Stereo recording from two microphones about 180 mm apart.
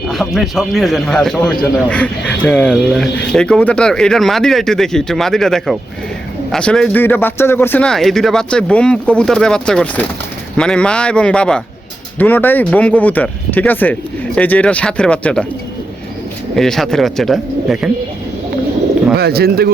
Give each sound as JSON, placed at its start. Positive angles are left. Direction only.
{"t": 0.1, "sound": "a man's voice", "side_deg": 0}
{"t": 16.6, "sound": "a man's voice", "side_deg": 0}
{"t": 19.1, "sound": "speech", "side_deg": -60}